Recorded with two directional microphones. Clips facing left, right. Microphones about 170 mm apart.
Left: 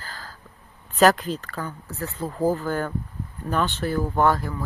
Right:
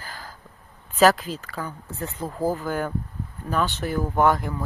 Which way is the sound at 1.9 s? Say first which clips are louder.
Left 1 dB; 20° right (ahead or behind).